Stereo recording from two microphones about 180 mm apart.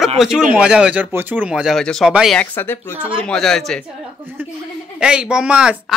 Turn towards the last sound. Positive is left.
turn(degrees=-5)  # may be behind; listen again after turning